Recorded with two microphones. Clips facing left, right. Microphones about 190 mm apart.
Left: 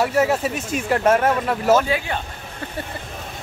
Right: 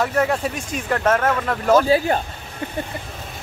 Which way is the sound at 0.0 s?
5° left (ahead or behind).